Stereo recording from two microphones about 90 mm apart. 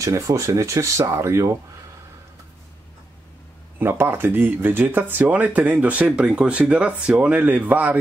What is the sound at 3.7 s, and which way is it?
Speech, 25° right (ahead or behind).